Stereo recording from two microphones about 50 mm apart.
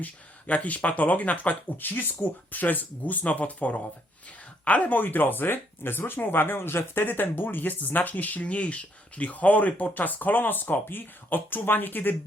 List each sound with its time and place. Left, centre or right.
0.0 s speech: left